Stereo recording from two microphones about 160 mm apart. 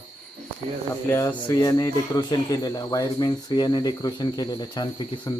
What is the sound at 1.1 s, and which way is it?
Speech, 20° left (ahead or behind).